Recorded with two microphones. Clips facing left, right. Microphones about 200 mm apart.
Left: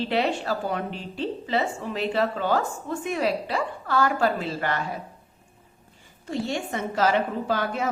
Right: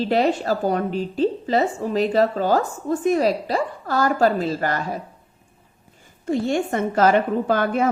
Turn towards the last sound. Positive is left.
turn(degrees=-55)  # may be behind; listen again after turning